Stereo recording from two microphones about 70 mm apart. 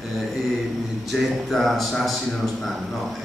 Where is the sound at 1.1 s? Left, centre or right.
Centre.